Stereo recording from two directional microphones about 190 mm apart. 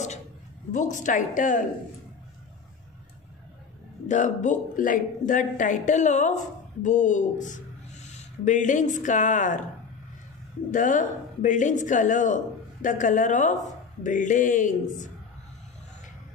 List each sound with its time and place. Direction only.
0.7 s speech: 40° left (ahead or behind)
4.1 s speech: 40° left (ahead or behind)
10.7 s speech: 45° left (ahead or behind)